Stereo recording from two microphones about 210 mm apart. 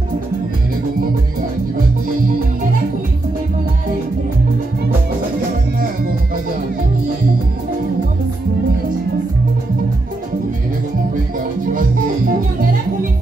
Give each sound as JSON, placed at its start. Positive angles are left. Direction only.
{"t": 11.3, "sound": "music", "side_deg": -40}